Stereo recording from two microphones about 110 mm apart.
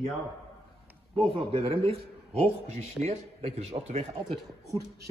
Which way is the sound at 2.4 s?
85° right.